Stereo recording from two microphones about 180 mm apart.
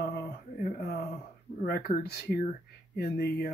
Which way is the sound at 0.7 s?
60° left (ahead or behind).